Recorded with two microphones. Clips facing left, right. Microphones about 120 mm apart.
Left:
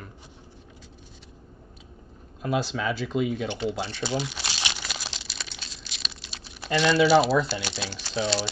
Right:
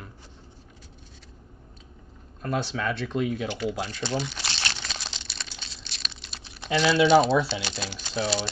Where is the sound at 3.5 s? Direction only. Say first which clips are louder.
Even; 25° left (ahead or behind).